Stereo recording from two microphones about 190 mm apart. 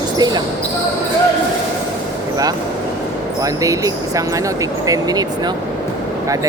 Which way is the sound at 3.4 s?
15° right (ahead or behind).